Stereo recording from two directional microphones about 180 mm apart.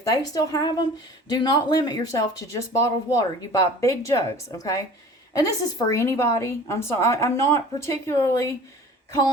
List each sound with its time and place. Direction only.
0.0 s a woman's voice: 20° left (ahead or behind)